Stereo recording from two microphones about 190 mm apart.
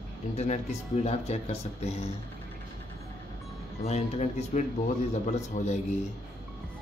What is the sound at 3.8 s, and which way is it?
Speech, 35° left (ahead or behind).